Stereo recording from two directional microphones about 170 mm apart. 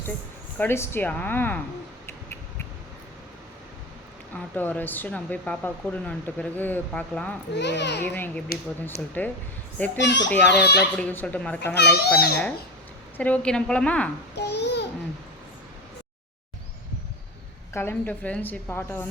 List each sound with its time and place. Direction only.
0.6 s speech: 15° left (ahead or behind)
4.4 s speech: 10° left (ahead or behind)
7.5 s a child's voice: 90° left
8.0 s a child's voice: 10° left (ahead or behind)
10.0 s a child's voice: 90° left
10.9 s speech: 10° left (ahead or behind)
11.7 s a child's voice: 80° left
13.1 s speech: 10° left (ahead or behind)
14.3 s a child's voice: 80° left
17.7 s speech: 10° left (ahead or behind)